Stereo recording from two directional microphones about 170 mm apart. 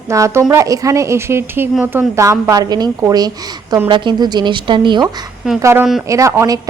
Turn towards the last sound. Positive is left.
turn(degrees=-20)  # may be behind; listen again after turning